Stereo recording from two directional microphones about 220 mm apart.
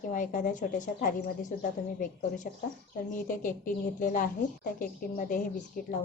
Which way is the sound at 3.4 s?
35° left (ahead or behind).